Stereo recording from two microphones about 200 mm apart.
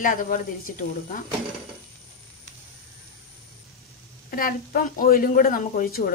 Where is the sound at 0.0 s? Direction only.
45° left (ahead or behind).